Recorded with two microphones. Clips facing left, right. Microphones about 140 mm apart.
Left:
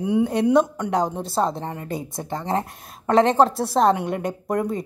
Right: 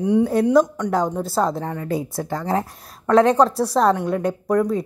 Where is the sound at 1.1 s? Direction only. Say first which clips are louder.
Right 2 dB; 25° left (ahead or behind).